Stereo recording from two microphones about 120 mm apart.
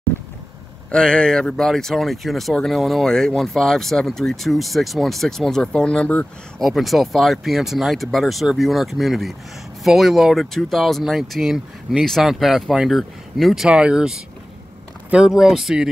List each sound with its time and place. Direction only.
0.1 s vehicle: 20° left (ahead or behind)
0.9 s speech: 5° left (ahead or behind)